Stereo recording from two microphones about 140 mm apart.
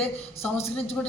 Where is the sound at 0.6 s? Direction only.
45° left (ahead or behind).